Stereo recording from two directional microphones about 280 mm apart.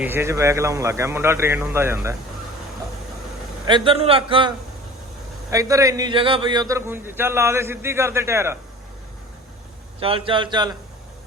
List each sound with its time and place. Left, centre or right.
0.0 s a man's voice: centre
3.7 s a man's voice: centre
10.0 s a man's voice: centre